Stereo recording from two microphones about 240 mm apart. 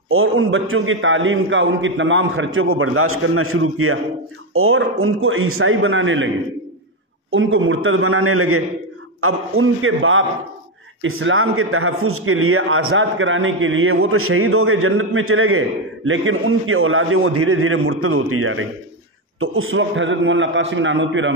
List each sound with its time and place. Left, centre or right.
0.1 s a man's voice: right